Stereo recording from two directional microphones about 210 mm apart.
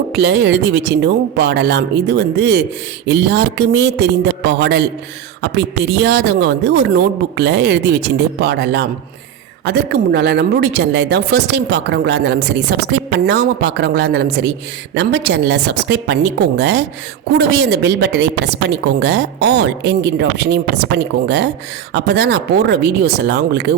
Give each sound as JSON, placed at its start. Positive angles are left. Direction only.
{"t": 0.1, "sound": "a woman's voice", "side_deg": -55}